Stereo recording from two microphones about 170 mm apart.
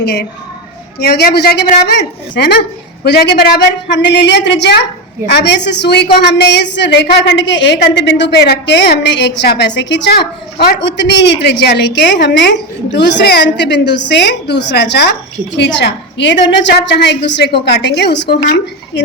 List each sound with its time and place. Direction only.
0.0 s a woman's voice: 70° left (ahead or behind)
1.9 s a woman's voice: 85° left
3.0 s a woman's voice: 70° left (ahead or behind)
15.5 s a woman's voice: 90° left